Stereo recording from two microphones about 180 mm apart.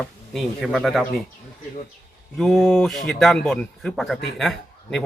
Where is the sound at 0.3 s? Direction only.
Centre (ahead or behind).